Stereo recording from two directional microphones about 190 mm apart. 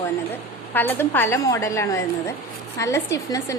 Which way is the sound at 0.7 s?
10° left (ahead or behind).